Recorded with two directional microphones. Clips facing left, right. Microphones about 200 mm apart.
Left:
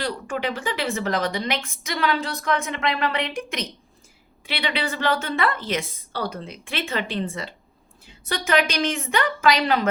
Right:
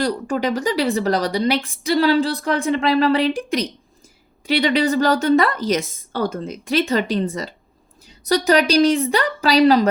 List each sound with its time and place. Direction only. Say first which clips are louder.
0.0 s a woman's voice: right 6 dB; 40° right (ahead or behind)